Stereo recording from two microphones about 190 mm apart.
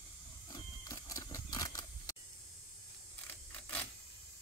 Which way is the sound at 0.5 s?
20° left (ahead or behind).